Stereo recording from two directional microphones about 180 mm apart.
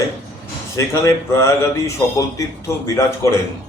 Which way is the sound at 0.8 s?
15° left (ahead or behind).